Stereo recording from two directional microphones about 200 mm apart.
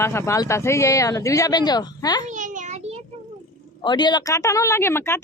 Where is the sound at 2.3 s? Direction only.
40° right (ahead or behind).